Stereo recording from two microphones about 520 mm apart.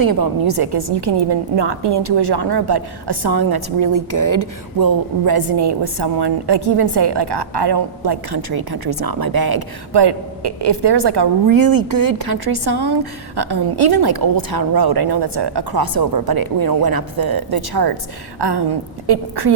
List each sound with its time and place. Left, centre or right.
0.0 s a woman's voice: right